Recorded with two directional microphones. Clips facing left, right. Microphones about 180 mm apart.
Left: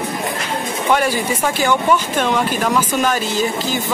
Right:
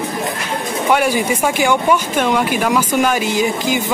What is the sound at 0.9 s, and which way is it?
Speech, 10° right (ahead or behind).